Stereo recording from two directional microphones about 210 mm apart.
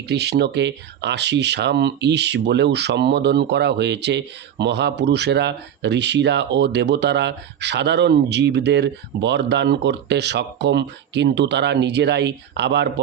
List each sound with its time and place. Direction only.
0.1 s speech: 50° right (ahead or behind)